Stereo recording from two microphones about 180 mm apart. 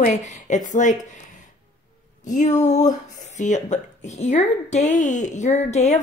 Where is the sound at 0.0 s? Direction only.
40° left (ahead or behind).